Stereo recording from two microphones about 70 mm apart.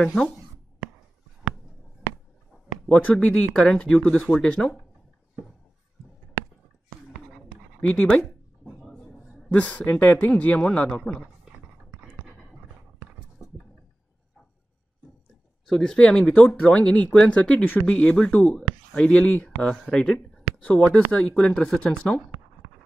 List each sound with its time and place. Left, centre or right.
0.0 s speech: centre
2.9 s speech: centre
7.4 s a sound: centre
8.7 s a sound: centre
9.5 s a man's voice: centre
15.6 s a man's voice: centre